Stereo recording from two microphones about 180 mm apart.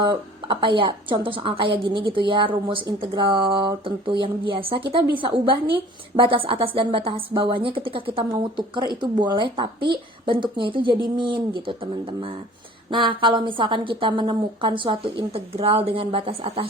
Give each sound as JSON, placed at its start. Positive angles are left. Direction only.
{"t": 0.0, "sound": "a woman's voice", "side_deg": -25}